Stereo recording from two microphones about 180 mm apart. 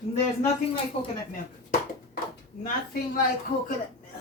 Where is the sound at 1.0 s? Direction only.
30° left (ahead or behind).